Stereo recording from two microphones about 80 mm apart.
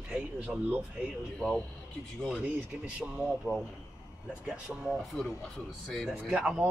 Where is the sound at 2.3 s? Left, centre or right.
Centre.